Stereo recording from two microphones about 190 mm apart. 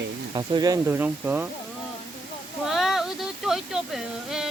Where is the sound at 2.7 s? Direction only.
Centre (ahead or behind).